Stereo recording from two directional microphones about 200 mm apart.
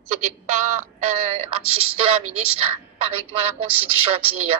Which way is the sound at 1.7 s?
90° right.